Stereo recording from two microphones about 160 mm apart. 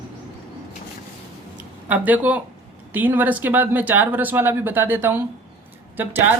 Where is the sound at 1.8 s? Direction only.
10° right (ahead or behind).